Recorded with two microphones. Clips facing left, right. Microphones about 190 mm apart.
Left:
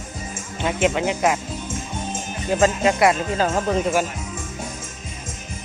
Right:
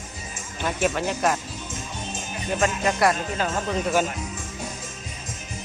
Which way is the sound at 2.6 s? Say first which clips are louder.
Left 5 dB; 20° left (ahead or behind).